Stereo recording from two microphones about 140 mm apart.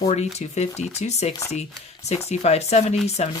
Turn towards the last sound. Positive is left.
turn(degrees=50)  # may be behind; listen again after turning